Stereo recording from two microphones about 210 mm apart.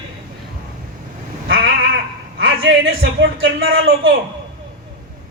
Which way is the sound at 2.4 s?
65° right (ahead or behind).